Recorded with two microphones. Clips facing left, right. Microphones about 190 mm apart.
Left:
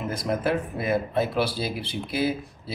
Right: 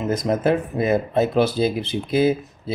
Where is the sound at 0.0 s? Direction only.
20° right (ahead or behind).